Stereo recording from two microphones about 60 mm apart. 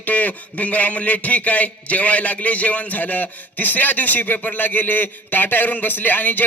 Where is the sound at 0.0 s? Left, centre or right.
Left.